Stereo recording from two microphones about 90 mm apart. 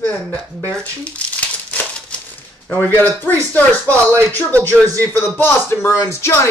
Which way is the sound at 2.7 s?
20° left (ahead or behind).